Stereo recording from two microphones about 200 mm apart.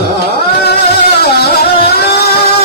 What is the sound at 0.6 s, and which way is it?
Music, 55° left (ahead or behind).